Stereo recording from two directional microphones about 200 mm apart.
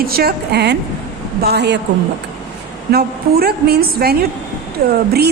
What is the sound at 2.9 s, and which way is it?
A woman's voice, 50° right (ahead or behind).